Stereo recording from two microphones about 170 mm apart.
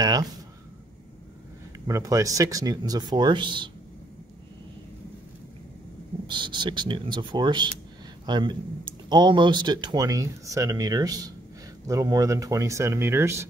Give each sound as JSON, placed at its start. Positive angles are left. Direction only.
{"t": 0.0, "sound": "speech", "side_deg": -25}
{"t": 1.9, "sound": "speech", "side_deg": -20}
{"t": 6.2, "sound": "speech", "side_deg": -25}